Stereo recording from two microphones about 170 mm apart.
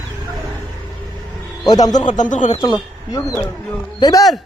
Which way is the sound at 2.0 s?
45° left (ahead or behind).